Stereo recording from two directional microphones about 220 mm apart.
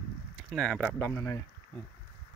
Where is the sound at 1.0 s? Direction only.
15° left (ahead or behind).